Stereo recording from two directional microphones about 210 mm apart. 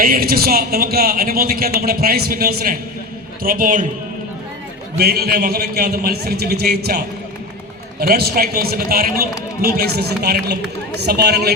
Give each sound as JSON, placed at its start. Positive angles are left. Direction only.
{"t": 0.0, "sound": "a man's voice", "side_deg": -45}
{"t": 4.9, "sound": "a man's voice", "side_deg": -50}